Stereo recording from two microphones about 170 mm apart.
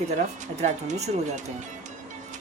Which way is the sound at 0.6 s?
40° right (ahead or behind).